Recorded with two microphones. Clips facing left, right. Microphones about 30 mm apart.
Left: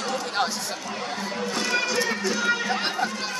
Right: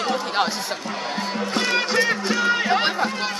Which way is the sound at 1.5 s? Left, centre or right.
Right.